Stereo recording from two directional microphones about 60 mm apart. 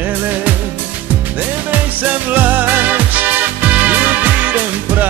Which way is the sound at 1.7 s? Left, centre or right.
Right.